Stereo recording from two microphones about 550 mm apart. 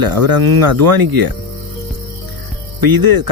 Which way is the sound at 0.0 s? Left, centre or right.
Right.